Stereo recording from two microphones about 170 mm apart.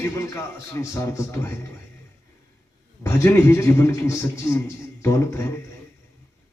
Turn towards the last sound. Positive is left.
turn(degrees=15)  # may be behind; listen again after turning